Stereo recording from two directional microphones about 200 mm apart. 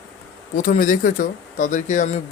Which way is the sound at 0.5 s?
40° left (ahead or behind).